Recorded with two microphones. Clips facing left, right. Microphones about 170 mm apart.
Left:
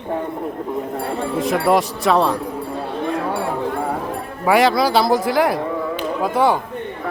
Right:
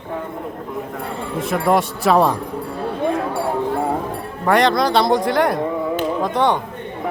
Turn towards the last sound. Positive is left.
turn(degrees=5)  # may be behind; listen again after turning